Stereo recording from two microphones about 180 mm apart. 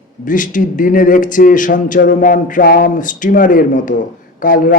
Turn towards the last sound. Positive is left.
turn(degrees=50)  # may be behind; listen again after turning